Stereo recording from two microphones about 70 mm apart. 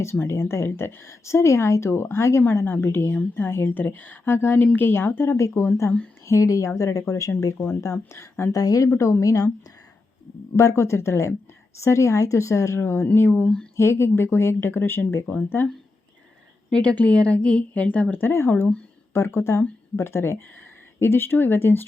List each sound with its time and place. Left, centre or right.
0.0 s a woman's voice: left
8.5 s speech: left
10.6 s a woman's voice: left
16.6 s a woman's voice: centre
18.3 s a woman's voice: left